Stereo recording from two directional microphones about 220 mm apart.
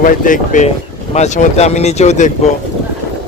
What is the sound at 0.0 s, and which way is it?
Speech, 35° left (ahead or behind).